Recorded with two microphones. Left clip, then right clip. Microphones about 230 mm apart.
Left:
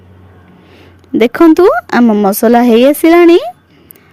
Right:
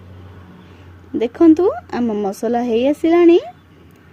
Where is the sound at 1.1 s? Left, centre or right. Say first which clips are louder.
Left 6 dB; left.